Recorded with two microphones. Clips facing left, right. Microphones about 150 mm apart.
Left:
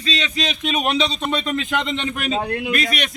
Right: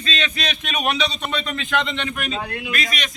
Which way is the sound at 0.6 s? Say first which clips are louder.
Left 3 dB; 30° left (ahead or behind).